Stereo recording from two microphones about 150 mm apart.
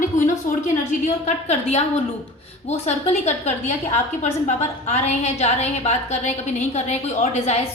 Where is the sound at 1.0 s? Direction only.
50° left (ahead or behind).